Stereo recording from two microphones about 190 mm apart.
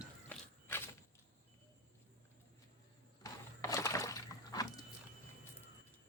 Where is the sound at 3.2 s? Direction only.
15° left (ahead or behind).